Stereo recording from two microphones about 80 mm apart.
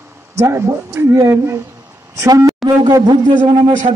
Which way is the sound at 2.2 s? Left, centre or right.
Right.